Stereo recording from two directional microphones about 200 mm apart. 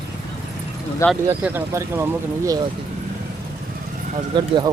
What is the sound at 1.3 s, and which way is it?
Speech, 10° right (ahead or behind).